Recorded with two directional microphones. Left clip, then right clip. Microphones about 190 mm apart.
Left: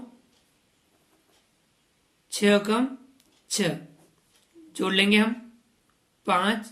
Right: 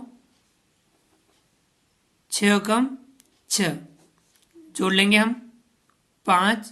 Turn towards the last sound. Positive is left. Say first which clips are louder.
# right 4 dB
turn(degrees=-40)  # may be behind; listen again after turning